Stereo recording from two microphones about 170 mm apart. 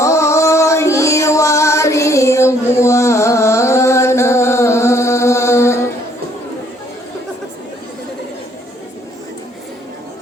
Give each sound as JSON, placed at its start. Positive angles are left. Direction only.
{"t": 0.0, "sound": "music", "side_deg": 15}